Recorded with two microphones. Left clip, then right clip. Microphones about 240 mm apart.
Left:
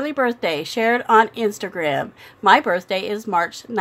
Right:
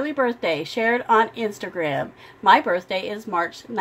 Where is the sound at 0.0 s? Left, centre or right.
Left.